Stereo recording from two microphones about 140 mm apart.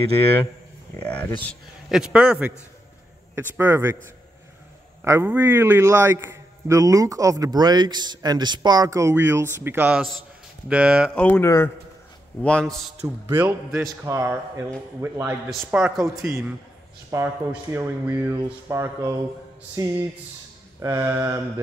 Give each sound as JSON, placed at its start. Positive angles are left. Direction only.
{"t": 0.9, "sound": "speech", "side_deg": 10}
{"t": 1.9, "sound": "a man's voice", "side_deg": -5}
{"t": 5.0, "sound": "a man's voice", "side_deg": -20}
{"t": 11.1, "sound": "speech", "side_deg": 10}
{"t": 11.4, "sound": "a man's voice", "side_deg": 20}
{"t": 12.4, "sound": "a man's voice", "side_deg": 5}
{"t": 13.0, "sound": "a man's voice", "side_deg": -20}